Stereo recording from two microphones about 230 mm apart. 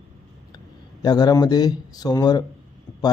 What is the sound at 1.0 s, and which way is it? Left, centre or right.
A man's voice, centre.